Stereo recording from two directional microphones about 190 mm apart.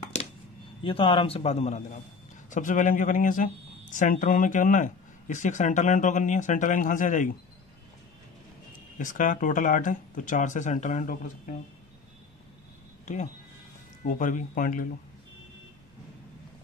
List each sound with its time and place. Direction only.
0.8 s speech: 30° left (ahead or behind); by 7.3 s 45° left (ahead or behind)
8.9 s speech: 45° left (ahead or behind)
13.0 s speech: 40° left (ahead or behind)